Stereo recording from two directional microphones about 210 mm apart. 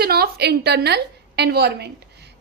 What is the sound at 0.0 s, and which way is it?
A woman's voice, 50° right (ahead or behind).